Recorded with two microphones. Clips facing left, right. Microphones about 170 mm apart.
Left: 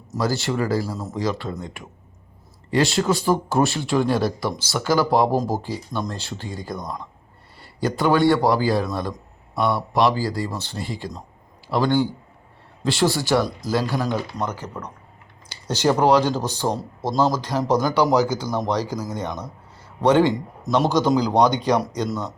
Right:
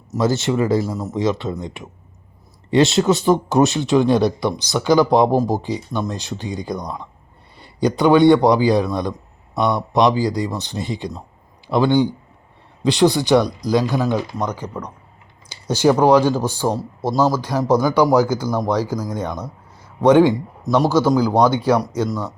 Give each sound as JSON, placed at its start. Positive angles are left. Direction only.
{"t": 0.2, "sound": "speech", "side_deg": -20}
{"t": 15.6, "sound": "speech", "side_deg": -10}
{"t": 20.7, "sound": "a man's voice", "side_deg": 0}